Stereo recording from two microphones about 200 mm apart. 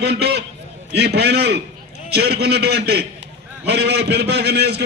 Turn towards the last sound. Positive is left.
turn(degrees=-55)  # may be behind; listen again after turning